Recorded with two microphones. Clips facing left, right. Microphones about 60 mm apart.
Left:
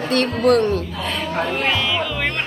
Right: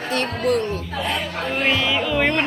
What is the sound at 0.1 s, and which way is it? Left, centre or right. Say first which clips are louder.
Speech: left 5 dB; left.